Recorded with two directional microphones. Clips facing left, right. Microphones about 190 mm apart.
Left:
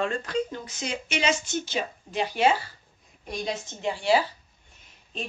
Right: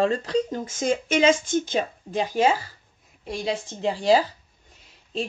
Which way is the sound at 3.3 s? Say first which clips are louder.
Right 4 dB; 30° right (ahead or behind).